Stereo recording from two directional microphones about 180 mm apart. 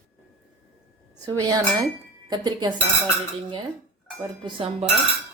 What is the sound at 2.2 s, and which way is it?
Speech, 25° right (ahead or behind).